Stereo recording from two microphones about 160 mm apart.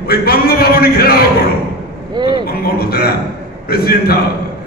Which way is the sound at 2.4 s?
75° left (ahead or behind).